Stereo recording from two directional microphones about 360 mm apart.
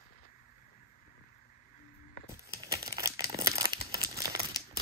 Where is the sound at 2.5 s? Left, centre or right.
Centre.